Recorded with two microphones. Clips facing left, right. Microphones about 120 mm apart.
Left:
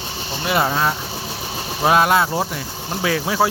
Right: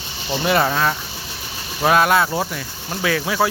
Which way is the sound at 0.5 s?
20° left (ahead or behind).